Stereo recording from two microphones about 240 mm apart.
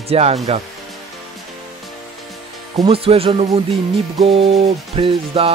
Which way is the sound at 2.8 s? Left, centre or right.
Right.